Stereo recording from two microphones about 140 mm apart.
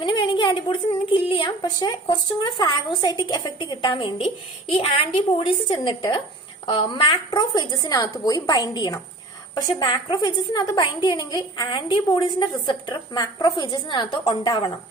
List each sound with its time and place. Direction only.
0.0 s a woman's voice: 35° left (ahead or behind)